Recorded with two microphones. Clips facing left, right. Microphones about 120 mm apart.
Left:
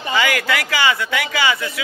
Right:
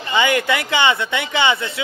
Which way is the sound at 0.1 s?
20° right (ahead or behind).